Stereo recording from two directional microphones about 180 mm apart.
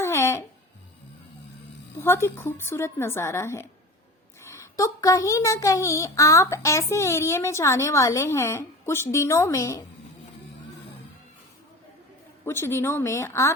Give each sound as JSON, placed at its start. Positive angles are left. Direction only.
{"t": 0.0, "sound": "music", "side_deg": 15}
{"t": 2.0, "sound": "a child's voice", "side_deg": 15}
{"t": 12.5, "sound": "a child's voice", "side_deg": 15}